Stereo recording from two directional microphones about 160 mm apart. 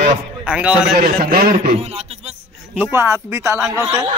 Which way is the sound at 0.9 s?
65° right (ahead or behind).